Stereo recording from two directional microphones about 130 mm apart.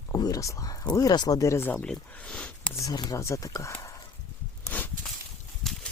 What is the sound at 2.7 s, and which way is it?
Speech, 25° left (ahead or behind).